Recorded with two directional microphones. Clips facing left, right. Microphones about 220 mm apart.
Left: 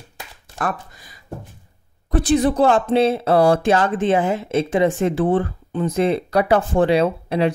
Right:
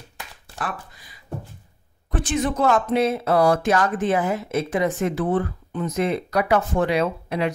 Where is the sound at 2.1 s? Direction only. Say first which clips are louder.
Left 7 dB; 35° left (ahead or behind).